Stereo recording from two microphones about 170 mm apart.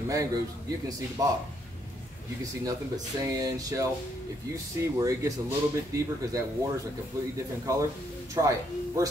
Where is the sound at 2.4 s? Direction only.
20° right (ahead or behind).